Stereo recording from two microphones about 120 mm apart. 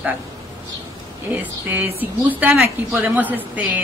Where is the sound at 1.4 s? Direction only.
15° right (ahead or behind).